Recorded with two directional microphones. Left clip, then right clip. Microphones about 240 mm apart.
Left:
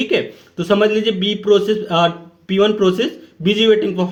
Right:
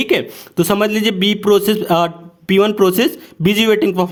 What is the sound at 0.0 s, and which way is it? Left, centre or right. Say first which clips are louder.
A man's voice: right 2 dB; right.